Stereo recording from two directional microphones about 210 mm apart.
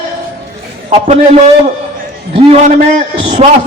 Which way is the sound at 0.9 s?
30° right (ahead or behind).